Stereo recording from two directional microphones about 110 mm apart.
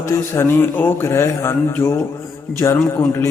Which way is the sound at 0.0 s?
25° left (ahead or behind).